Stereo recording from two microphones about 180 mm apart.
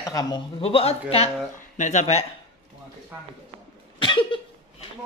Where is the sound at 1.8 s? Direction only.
40° left (ahead or behind).